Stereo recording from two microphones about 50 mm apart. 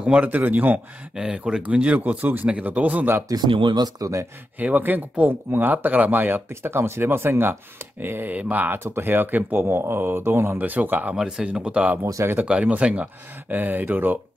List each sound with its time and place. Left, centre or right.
0.0 s a man's voice: right
0.4 s speech: right
1.1 s speech: centre
1.6 s speech: right
4.0 s speech: right
4.6 s speech: right
6.5 s speech: right
10.6 s speech: right
11.1 s speech: centre
12.0 s speech: right
12.4 s speech: right